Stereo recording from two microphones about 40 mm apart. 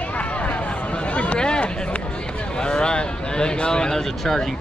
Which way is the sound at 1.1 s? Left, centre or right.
Left.